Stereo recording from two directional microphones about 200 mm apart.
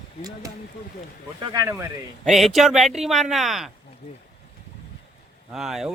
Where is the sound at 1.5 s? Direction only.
15° right (ahead or behind).